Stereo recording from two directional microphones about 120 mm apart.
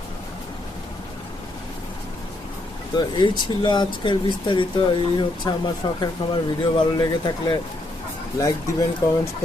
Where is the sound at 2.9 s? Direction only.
35° left (ahead or behind).